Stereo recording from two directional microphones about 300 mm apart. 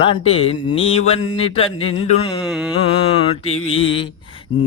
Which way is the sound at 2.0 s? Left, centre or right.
Centre.